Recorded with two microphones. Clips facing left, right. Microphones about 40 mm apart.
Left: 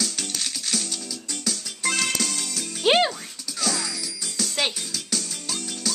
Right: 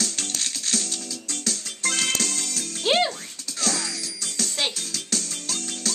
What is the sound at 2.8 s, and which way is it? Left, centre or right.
Music, left.